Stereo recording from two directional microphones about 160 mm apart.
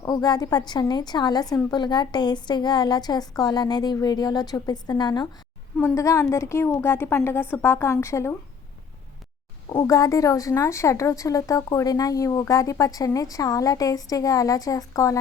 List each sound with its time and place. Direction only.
0.0 s a woman's voice: 25° left (ahead or behind)
9.6 s a woman's voice: 20° left (ahead or behind)